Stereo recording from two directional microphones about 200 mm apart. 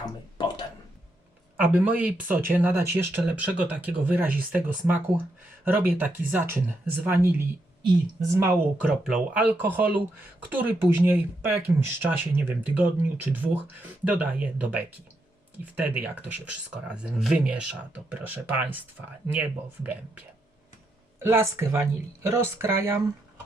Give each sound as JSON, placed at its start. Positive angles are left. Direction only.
{"t": 0.0, "sound": "a sound", "side_deg": 20}
{"t": 1.5, "sound": "speech", "side_deg": -10}
{"t": 16.0, "sound": "speech", "side_deg": -5}